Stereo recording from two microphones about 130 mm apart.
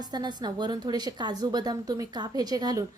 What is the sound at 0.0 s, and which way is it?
A woman's voice, 35° right (ahead or behind).